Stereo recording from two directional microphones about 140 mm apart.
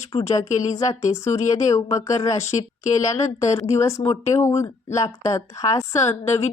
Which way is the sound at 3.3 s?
20° left (ahead or behind).